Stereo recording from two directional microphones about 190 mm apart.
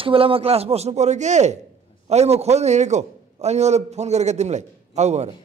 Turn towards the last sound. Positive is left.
turn(degrees=-35)  # may be behind; listen again after turning